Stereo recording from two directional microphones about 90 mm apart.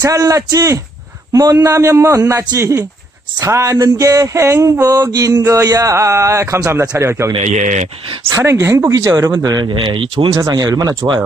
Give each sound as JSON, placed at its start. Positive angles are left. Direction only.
{"t": 0.0, "sound": "a sound", "side_deg": -35}
{"t": 8.9, "sound": "speech", "side_deg": -40}
{"t": 9.8, "sound": "speech", "side_deg": -70}
{"t": 10.5, "sound": "speech", "side_deg": -45}